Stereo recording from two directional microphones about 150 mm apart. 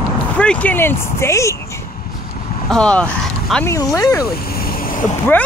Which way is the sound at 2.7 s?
5° left (ahead or behind).